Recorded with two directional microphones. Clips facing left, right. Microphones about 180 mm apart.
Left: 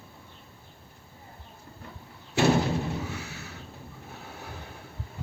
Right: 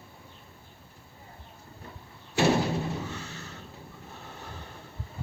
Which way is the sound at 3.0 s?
10° left (ahead or behind).